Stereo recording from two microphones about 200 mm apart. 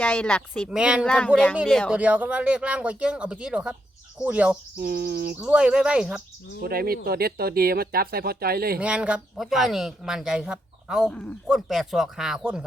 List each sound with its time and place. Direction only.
0.0 s speech: 5° left (ahead or behind)
0.8 s speech: 5° right (ahead or behind)
1.0 s speech: 5° left (ahead or behind)
4.8 s speech: 50° right (ahead or behind)
5.4 s speech: 5° right (ahead or behind)
6.6 s speech: 50° right (ahead or behind)
8.8 s speech: 5° right (ahead or behind)